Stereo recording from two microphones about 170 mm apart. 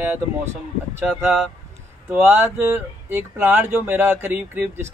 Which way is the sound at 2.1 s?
10° right (ahead or behind).